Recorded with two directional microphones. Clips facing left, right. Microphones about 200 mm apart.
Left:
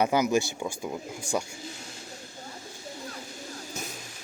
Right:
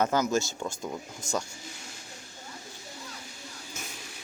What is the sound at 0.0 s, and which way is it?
Speech, 15° left (ahead or behind).